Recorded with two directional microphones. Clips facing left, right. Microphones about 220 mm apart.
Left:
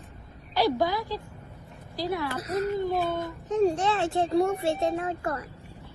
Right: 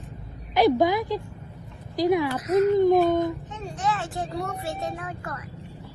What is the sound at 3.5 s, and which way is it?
Speech, 35° left (ahead or behind).